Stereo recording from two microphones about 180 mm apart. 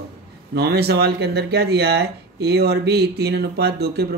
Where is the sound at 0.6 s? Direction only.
65° right (ahead or behind).